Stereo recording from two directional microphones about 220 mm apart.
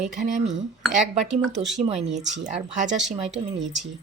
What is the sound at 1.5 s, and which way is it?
Speech, centre (ahead or behind).